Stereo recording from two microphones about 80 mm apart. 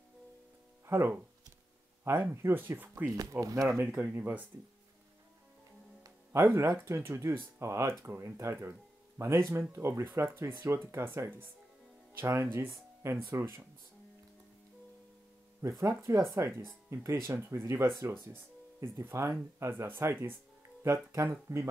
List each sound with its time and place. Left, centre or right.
0.8 s speech: right
3.2 s speech: right
3.8 s speech: centre
6.5 s speech: right
15.8 s speech: right
21.3 s speech: right